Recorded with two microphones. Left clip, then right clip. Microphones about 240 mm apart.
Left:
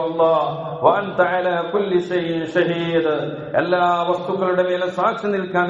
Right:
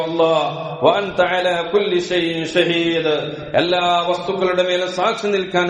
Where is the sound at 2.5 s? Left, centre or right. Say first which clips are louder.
Right 2 dB; right.